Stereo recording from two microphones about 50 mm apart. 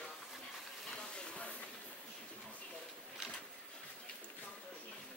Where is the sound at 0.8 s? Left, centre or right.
Centre.